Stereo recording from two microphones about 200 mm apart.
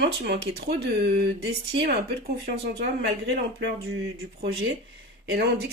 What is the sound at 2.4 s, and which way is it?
A woman's voice, 55° right (ahead or behind).